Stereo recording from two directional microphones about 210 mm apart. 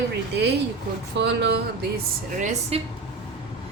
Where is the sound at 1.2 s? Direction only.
55° right (ahead or behind).